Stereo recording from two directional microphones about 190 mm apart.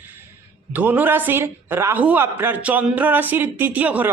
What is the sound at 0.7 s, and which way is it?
A man's voice, 10° right (ahead or behind).